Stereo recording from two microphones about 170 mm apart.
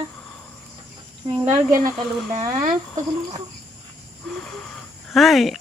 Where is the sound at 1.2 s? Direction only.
25° right (ahead or behind).